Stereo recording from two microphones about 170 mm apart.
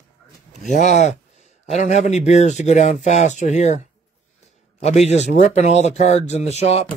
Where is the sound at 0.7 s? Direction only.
45° left (ahead or behind).